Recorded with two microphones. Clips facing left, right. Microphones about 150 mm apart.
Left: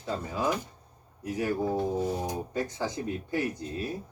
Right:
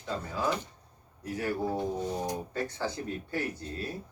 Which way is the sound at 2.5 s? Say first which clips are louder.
Left 2 dB; 15° left (ahead or behind).